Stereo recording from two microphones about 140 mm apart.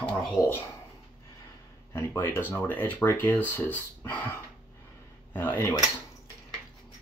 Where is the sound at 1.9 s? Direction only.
20° left (ahead or behind).